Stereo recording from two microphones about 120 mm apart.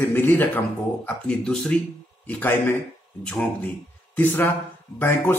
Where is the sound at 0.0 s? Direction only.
15° left (ahead or behind).